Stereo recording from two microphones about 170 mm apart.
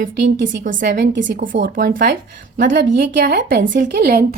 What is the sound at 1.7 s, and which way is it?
Speech, 55° right (ahead or behind).